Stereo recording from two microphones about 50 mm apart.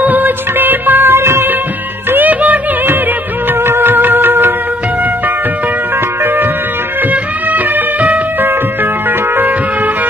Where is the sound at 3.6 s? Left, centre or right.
Right.